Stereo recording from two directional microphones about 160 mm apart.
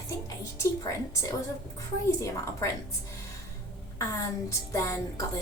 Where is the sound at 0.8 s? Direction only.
20° left (ahead or behind).